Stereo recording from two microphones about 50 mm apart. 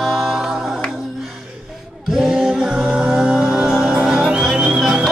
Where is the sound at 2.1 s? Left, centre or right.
Centre.